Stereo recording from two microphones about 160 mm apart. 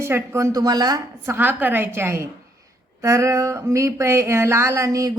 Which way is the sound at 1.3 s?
10° right (ahead or behind).